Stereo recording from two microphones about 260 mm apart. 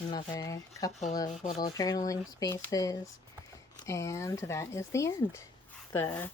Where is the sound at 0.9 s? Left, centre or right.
Left.